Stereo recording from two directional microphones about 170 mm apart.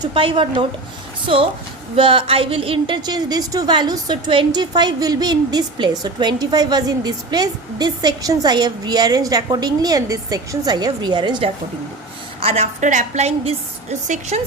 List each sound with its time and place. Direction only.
0.0 s a woman's voice: 30° right (ahead or behind)
2.0 s a woman's voice: 30° right (ahead or behind)